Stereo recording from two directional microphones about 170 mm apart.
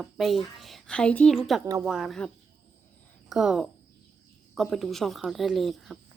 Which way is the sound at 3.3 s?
Centre (ahead or behind).